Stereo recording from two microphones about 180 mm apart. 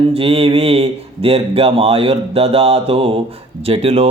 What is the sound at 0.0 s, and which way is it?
Speech, 30° right (ahead or behind).